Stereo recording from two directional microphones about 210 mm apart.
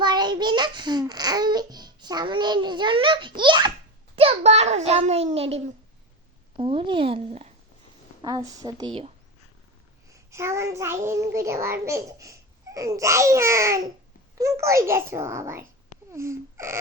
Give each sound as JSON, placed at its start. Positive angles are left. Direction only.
{"t": 0.0, "sound": "a child's voice", "side_deg": -20}
{"t": 8.2, "sound": "speech", "side_deg": -15}
{"t": 10.1, "sound": "a child's voice", "side_deg": -15}